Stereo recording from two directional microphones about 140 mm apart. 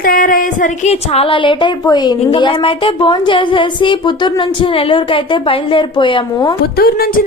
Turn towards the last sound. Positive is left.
turn(degrees=90)